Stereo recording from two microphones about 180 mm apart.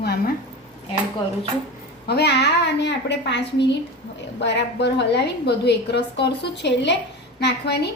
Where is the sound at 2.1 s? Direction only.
65° left (ahead or behind).